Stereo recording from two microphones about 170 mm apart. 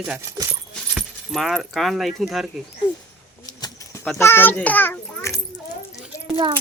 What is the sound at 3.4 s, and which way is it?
Bird, 20° left (ahead or behind).